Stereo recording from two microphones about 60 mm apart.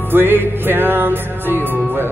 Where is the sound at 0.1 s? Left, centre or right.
Right.